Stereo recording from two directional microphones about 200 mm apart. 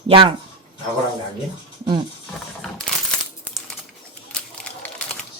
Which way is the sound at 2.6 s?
5° left (ahead or behind).